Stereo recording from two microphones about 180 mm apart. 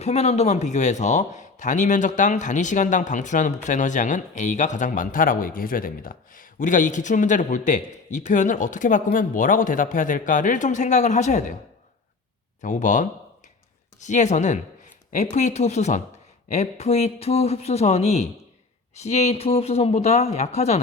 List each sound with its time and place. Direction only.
0.0 s speech: 35° left (ahead or behind)
12.6 s speech: 45° left (ahead or behind)